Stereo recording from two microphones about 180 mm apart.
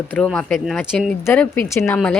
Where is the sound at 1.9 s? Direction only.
5° left (ahead or behind).